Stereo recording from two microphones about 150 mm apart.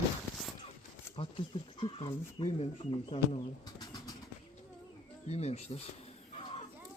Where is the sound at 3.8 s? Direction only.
25° left (ahead or behind).